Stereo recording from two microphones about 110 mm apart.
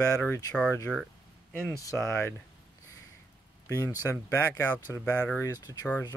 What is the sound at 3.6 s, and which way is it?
Speech, 25° left (ahead or behind).